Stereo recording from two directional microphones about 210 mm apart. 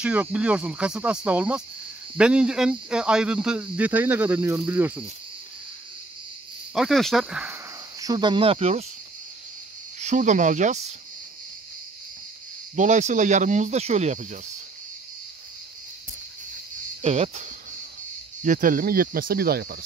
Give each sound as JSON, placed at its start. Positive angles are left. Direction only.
{"t": 0.0, "sound": "speech", "side_deg": -5}
{"t": 6.7, "sound": "speech", "side_deg": 0}
{"t": 8.0, "sound": "speech", "side_deg": -20}
{"t": 9.9, "sound": "speech", "side_deg": -35}
{"t": 12.7, "sound": "speech", "side_deg": -35}
{"t": 17.0, "sound": "speech", "side_deg": -30}